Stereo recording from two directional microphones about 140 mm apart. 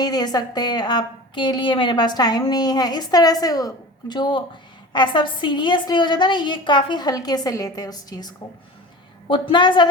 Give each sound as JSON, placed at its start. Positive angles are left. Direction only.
{"t": 0.0, "sound": "a woman's voice", "side_deg": 30}